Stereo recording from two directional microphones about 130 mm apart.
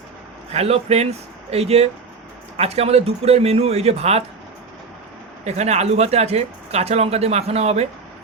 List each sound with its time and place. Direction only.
0.5 s speech: 55° right (ahead or behind)
5.5 s speech: 60° right (ahead or behind)